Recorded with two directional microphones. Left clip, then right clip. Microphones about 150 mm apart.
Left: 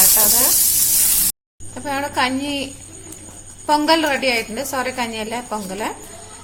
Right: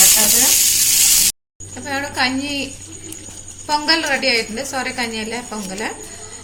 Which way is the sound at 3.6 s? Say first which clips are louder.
Left 2 dB; 90° left.